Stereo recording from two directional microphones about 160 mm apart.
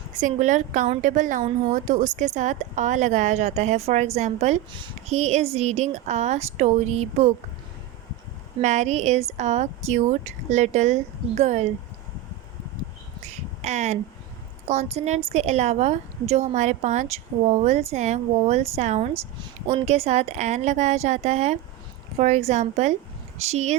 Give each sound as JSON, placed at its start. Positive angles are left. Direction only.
{"t": 0.2, "sound": "a woman's voice", "side_deg": -50}
{"t": 8.6, "sound": "a woman's voice", "side_deg": -45}
{"t": 13.2, "sound": "a sound", "side_deg": -45}
{"t": 14.7, "sound": "a woman's voice", "side_deg": -45}